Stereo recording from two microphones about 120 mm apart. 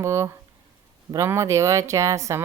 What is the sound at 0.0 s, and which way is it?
Speech, 25° right (ahead or behind).